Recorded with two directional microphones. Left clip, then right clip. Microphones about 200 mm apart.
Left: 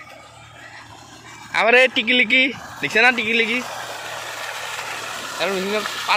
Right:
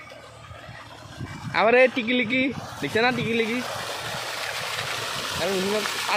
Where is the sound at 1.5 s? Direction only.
5° right (ahead or behind).